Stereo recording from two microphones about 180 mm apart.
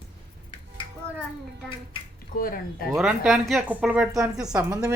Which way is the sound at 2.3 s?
55° left (ahead or behind).